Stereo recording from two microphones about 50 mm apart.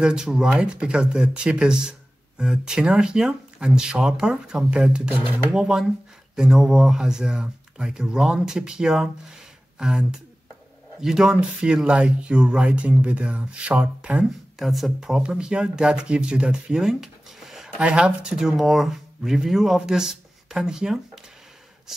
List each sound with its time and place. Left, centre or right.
0.0 s speech: centre
11.6 s speech: right
14.6 s speech: centre
15.2 s speech: centre
17.7 s speech: right
18.3 s speech: centre